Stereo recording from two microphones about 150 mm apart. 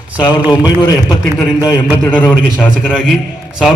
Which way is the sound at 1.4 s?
15° left (ahead or behind).